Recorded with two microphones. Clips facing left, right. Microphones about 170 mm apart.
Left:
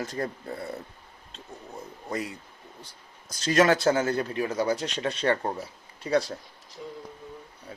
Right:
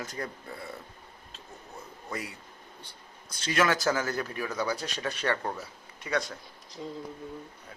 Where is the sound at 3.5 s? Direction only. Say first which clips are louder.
Left 5 dB; 35° left (ahead or behind).